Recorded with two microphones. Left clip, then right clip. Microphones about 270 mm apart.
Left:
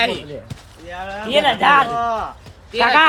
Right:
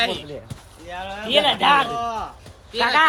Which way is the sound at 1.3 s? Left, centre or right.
Centre.